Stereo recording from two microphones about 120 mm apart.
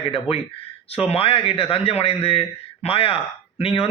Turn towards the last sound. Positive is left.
turn(degrees=50)  # may be behind; listen again after turning